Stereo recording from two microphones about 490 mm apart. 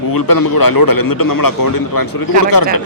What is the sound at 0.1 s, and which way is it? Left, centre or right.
A man's voice, left.